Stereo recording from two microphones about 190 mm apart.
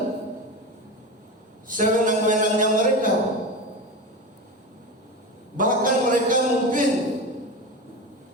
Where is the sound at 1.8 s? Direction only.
45° right (ahead or behind).